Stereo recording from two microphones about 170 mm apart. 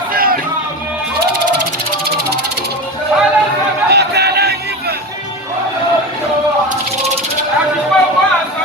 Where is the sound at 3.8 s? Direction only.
75° right (ahead or behind).